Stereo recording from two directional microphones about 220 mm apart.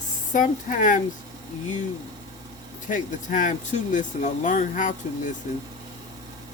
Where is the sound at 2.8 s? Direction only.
35° left (ahead or behind).